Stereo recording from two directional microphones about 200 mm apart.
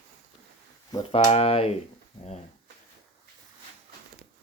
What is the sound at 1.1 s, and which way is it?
Speech, 30° left (ahead or behind).